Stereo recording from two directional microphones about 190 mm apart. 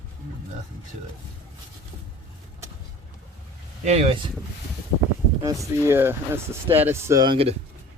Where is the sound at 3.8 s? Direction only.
35° right (ahead or behind).